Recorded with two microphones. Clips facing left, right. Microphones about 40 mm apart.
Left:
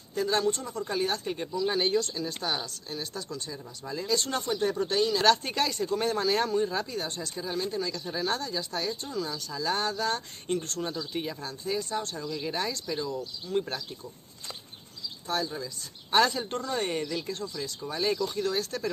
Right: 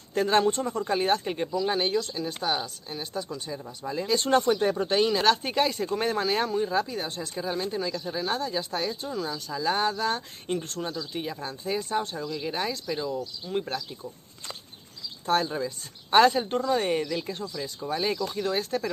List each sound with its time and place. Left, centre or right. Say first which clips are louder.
0.1 s speech: right 4 dB; right
1.7 s speech: right 1 dB; centre
4.3 s speech: right 6 dB; right
5.2 s speech: right 1 dB; centre
8.1 s speech: right 1 dB; centre
8.5 s speech: right 3 dB; right
9.0 s speech: right 2 dB; centre
11.4 s speech: right 2 dB; centre
15.2 s speech: right 6 dB; right
16.1 s speech: right 5 dB; right